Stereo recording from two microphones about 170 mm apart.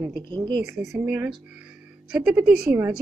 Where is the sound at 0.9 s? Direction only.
10° right (ahead or behind).